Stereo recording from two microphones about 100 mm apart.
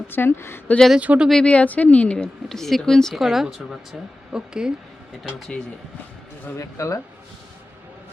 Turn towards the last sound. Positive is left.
turn(degrees=30)  # may be behind; listen again after turning